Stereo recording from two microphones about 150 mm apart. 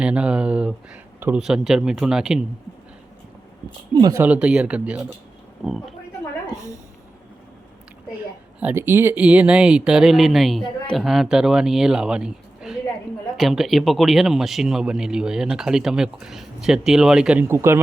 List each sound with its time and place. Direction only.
0.0 s speech: 5° right (ahead or behind)
3.9 s speech: 20° right (ahead or behind)
4.3 s speech: 5° right (ahead or behind)
8.6 s speech: 15° right (ahead or behind)
17.5 s speech: 15° right (ahead or behind)